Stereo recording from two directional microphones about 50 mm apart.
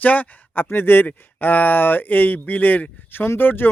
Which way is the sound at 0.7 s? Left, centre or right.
Left.